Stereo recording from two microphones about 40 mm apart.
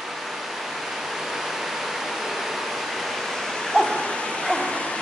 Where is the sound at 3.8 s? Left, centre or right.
Centre.